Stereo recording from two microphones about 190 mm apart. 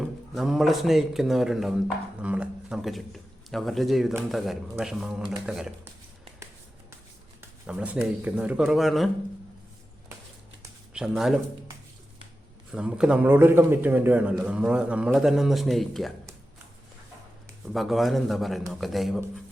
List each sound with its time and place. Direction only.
0.0 s a man's voice: centre (ahead or behind)
7.7 s a man's voice: 5° right (ahead or behind)
10.9 s speech: centre (ahead or behind)
12.7 s a man's voice: 5° right (ahead or behind)
17.7 s a man's voice: centre (ahead or behind)